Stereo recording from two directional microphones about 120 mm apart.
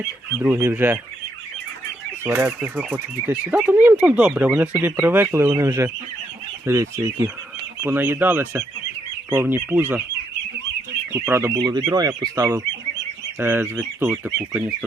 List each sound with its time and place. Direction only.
0.4 s speech: 15° right (ahead or behind)
2.2 s speech: 15° right (ahead or behind)
11.1 s speech: 20° right (ahead or behind)
11.5 s speech: 35° right (ahead or behind); by 14.8 s 10° right (ahead or behind)